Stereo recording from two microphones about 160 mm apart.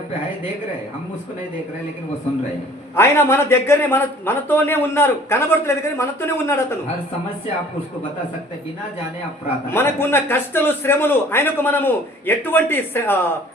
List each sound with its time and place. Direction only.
2.9 s a man's voice: 15° left (ahead or behind)
9.6 s a man's voice: 15° left (ahead or behind)